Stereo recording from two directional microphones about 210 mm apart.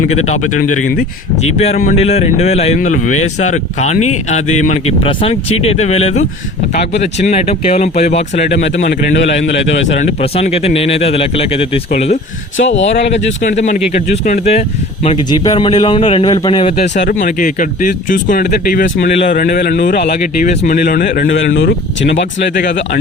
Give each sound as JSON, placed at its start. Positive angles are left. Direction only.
{"t": 1.4, "sound": "a man's voice", "side_deg": 30}
{"t": 9.1, "sound": "a man's voice", "side_deg": 55}
{"t": 9.9, "sound": "speech", "side_deg": 30}
{"t": 12.5, "sound": "a man's voice", "side_deg": 60}
{"t": 12.9, "sound": "a man's voice", "side_deg": 30}